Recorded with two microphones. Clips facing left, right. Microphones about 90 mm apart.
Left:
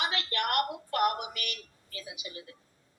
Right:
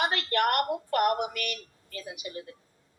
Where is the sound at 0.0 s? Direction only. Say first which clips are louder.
Right 6 dB; 45° right (ahead or behind).